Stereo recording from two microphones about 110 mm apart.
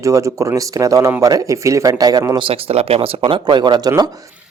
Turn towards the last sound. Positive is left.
turn(degrees=-35)  # may be behind; listen again after turning